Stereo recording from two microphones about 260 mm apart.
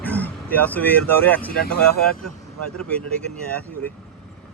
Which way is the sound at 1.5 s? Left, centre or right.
Left.